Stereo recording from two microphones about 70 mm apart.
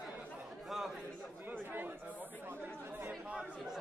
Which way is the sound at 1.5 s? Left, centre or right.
Right.